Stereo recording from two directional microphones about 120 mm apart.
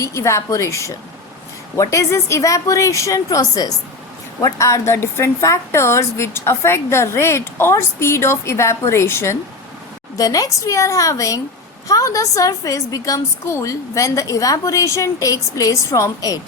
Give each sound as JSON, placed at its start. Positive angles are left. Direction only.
{"t": 0.0, "sound": "a woman's voice", "side_deg": 25}